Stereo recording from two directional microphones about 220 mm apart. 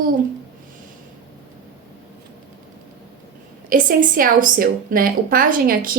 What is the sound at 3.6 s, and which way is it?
A woman's voice, 40° right (ahead or behind).